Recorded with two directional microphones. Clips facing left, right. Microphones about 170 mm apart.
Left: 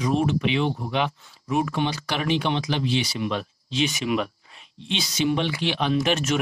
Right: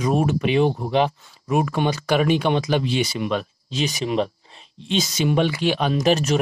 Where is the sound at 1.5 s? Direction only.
50° right (ahead or behind).